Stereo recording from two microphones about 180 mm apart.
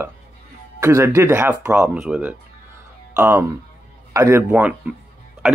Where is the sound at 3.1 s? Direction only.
15° right (ahead or behind).